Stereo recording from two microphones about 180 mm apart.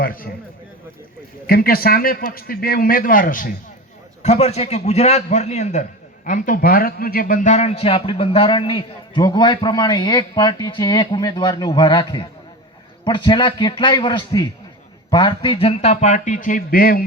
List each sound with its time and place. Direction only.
0.0 s a man's voice: 55° left (ahead or behind)
1.5 s a man's voice: 55° left (ahead or behind)
4.2 s a man's voice: 35° left (ahead or behind); by 17.0 s 55° left (ahead or behind)